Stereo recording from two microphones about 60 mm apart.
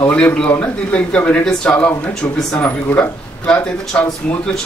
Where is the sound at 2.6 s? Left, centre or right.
Left.